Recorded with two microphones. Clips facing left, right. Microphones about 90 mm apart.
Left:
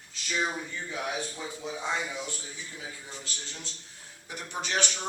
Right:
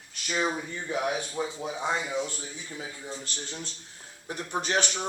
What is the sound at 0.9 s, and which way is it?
A man's voice, 45° right (ahead or behind).